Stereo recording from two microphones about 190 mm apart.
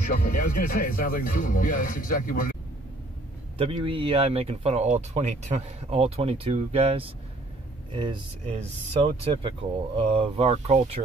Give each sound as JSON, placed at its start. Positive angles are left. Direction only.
{"t": 0.2, "sound": "speech", "side_deg": 45}
{"t": 3.5, "sound": "speech", "side_deg": -30}